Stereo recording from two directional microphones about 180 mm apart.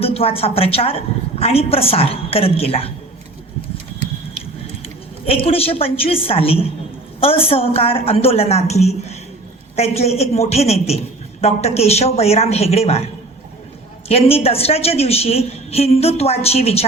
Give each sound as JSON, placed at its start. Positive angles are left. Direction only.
{"t": 0.0, "sound": "a woman's voice", "side_deg": 35}
{"t": 5.2, "sound": "a woman's voice", "side_deg": 30}
{"t": 14.1, "sound": "a woman's voice", "side_deg": 35}